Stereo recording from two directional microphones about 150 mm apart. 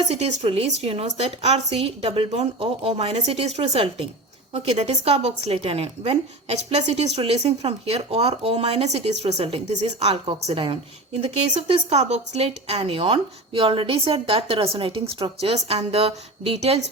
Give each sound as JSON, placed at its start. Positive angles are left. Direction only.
{"t": 0.1, "sound": "a woman's voice", "side_deg": -45}